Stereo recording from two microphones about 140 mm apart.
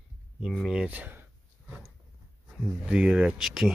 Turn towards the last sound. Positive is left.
turn(degrees=-5)  # may be behind; listen again after turning